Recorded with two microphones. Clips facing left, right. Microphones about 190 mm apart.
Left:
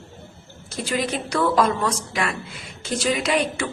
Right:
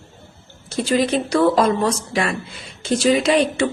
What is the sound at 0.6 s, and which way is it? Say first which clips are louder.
A woman's voice: right 7 dB; 30° right (ahead or behind).